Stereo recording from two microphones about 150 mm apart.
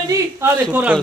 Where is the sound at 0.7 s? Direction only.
10° right (ahead or behind).